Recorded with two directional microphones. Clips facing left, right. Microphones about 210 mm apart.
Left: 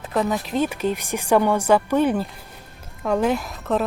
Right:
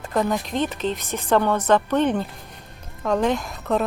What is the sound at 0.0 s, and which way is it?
A woman's voice, centre (ahead or behind).